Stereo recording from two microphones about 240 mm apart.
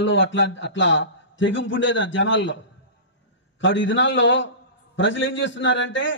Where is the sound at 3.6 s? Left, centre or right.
Left.